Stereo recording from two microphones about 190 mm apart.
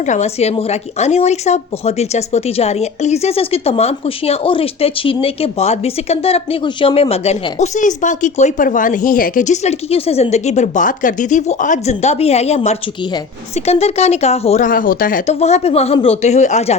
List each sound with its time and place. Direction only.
0.0 s speech: 40° left (ahead or behind)